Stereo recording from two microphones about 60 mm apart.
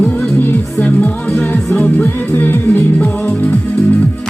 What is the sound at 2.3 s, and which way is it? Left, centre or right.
Music, left.